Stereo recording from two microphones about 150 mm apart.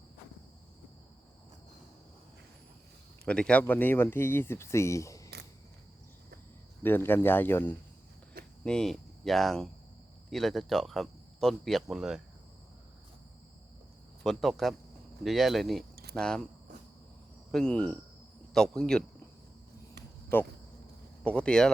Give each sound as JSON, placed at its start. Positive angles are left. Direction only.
{"t": 3.2, "sound": "speech", "side_deg": 5}
{"t": 6.8, "sound": "speech", "side_deg": 15}
{"t": 14.3, "sound": "speech", "side_deg": 0}
{"t": 17.5, "sound": "speech", "side_deg": 5}
{"t": 20.3, "sound": "speech", "side_deg": 15}